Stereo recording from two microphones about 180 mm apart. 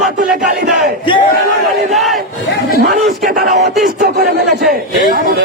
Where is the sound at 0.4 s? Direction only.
45° right (ahead or behind).